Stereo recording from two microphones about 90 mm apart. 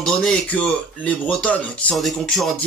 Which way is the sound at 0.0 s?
5° left (ahead or behind).